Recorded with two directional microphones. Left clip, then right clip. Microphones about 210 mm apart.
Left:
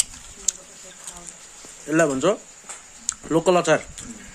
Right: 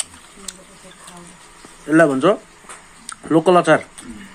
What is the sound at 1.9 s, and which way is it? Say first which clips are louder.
A man's voice: right 6 dB; 5° left (ahead or behind).